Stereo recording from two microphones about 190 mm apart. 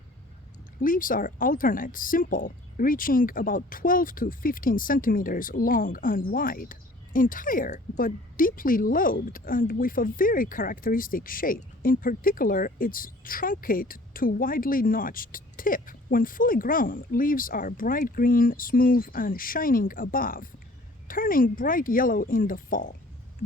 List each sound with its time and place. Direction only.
0.8 s speech: 45° left (ahead or behind)